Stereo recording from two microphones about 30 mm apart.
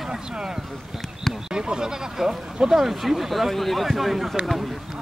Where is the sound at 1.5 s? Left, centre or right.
Right.